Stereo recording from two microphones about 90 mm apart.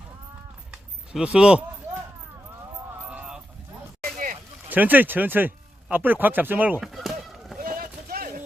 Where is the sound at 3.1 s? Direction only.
15° right (ahead or behind).